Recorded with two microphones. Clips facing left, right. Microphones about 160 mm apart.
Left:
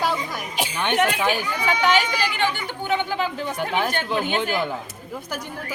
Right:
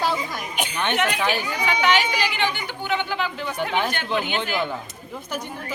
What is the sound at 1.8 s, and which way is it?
Speech, 45° left (ahead or behind).